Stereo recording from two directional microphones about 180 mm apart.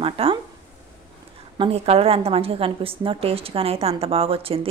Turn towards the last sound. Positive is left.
turn(degrees=-30)  # may be behind; listen again after turning